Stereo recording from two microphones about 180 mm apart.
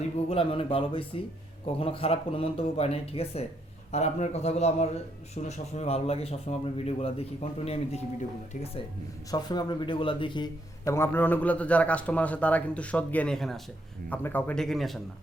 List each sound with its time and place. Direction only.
0.3 s a man's voice: 30° left (ahead or behind)
9.3 s a man's voice: 25° left (ahead or behind); by 14.9 s centre (ahead or behind)